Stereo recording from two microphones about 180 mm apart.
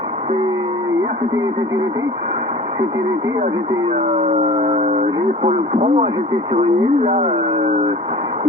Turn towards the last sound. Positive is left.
turn(degrees=-30)  # may be behind; listen again after turning